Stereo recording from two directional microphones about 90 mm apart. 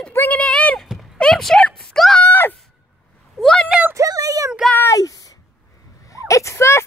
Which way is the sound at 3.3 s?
5° left (ahead or behind).